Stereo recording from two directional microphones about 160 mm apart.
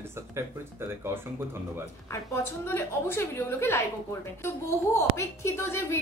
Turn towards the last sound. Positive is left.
turn(degrees=15)  # may be behind; listen again after turning